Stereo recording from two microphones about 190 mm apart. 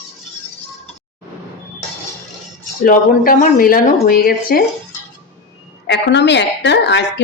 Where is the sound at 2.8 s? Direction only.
45° left (ahead or behind).